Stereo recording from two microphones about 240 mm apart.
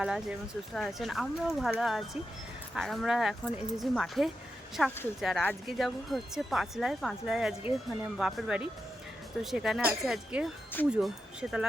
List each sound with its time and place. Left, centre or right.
0.0 s speech: centre